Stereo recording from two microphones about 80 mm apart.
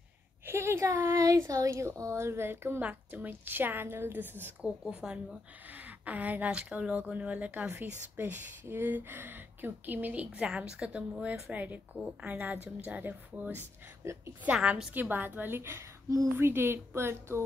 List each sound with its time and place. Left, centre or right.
0.5 s speech: right
4.9 s a woman's voice: centre
11.5 s speech: centre
14.0 s speech: right
14.4 s a woman's voice: centre
15.0 s speech: right